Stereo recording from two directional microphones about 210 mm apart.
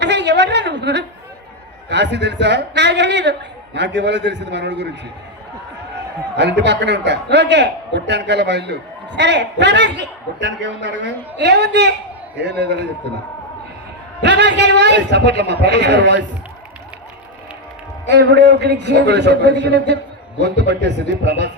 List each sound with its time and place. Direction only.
0.0 s a sound: 55° right (ahead or behind)
1.9 s a man's voice: 55° right (ahead or behind)
6.3 s a man's voice: 55° right (ahead or behind)
14.2 s a man's voice: 55° right (ahead or behind)
18.1 s a man's voice: 55° right (ahead or behind)